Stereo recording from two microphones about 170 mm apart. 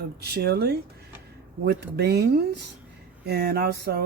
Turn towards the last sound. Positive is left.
turn(degrees=-65)  # may be behind; listen again after turning